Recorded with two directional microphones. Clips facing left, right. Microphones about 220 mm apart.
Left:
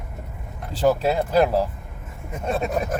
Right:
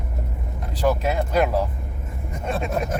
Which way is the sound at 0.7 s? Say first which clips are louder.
Left 2 dB; 30° left (ahead or behind).